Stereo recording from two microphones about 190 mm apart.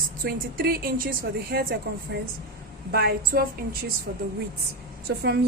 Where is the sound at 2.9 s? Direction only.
55° right (ahead or behind).